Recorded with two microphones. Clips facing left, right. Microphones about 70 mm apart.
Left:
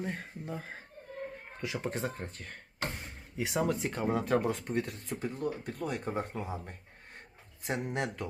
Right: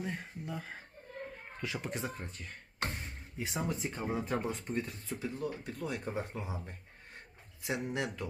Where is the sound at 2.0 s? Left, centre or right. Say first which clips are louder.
Left 3 dB; left.